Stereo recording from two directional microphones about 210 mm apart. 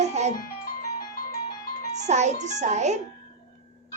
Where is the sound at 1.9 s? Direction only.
35° right (ahead or behind).